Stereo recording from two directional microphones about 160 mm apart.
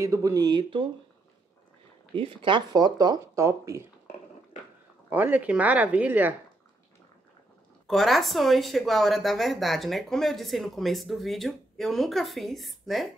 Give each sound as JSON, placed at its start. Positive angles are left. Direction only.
{"t": 0.0, "sound": "speech", "side_deg": -20}
{"t": 2.1, "sound": "speech", "side_deg": -35}
{"t": 5.1, "sound": "speech", "side_deg": -10}
{"t": 7.8, "sound": "a woman's voice", "side_deg": 0}